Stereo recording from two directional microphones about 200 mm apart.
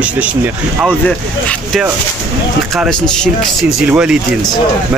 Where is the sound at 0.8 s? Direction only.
Centre (ahead or behind).